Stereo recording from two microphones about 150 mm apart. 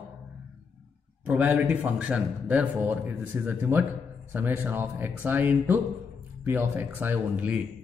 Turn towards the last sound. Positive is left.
turn(degrees=-10)  # may be behind; listen again after turning